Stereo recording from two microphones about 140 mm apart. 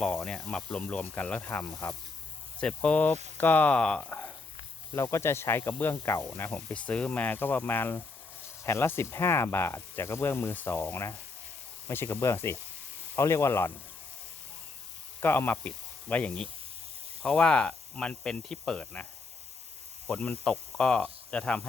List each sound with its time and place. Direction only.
0.0 s speech: 5° left (ahead or behind)
15.2 s speech: 15° left (ahead or behind)
20.1 s speech: 5° left (ahead or behind)